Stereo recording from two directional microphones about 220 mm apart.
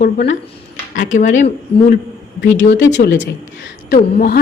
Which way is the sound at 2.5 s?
55° left (ahead or behind).